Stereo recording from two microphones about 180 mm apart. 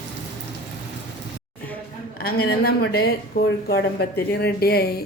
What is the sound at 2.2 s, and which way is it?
Speech, 60° left (ahead or behind).